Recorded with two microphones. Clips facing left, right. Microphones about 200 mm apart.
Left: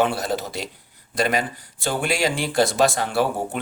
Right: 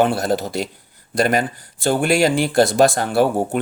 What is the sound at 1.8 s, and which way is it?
Speech, 50° right (ahead or behind).